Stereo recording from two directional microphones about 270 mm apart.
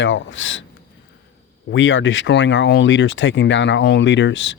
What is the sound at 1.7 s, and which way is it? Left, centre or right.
Speech, left.